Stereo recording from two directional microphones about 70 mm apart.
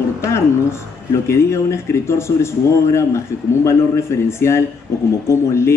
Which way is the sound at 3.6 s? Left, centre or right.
Left.